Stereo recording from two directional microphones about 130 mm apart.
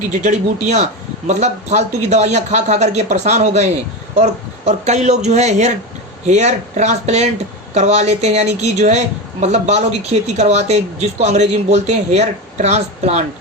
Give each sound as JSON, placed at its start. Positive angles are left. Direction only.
{"t": 0.1, "sound": "a woman's voice", "side_deg": -65}